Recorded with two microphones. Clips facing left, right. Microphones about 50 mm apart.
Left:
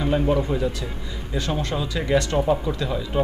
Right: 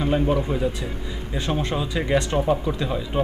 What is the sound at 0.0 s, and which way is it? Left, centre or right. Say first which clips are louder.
Speech: even; centre.